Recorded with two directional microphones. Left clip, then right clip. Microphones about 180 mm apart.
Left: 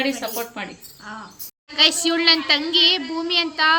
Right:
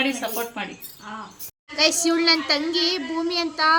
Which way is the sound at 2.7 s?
10° left (ahead or behind).